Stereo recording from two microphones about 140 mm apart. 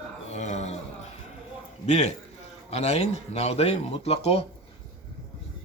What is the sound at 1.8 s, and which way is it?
A man's voice, 55° left (ahead or behind).